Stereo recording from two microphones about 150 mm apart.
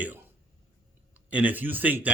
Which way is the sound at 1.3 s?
10° right (ahead or behind).